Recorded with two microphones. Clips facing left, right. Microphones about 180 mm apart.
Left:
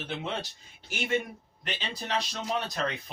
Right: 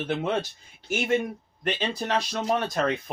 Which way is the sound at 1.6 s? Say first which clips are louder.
Right 9 dB; 50° right (ahead or behind).